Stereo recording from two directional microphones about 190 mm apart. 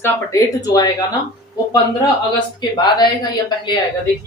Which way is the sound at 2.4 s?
25° left (ahead or behind).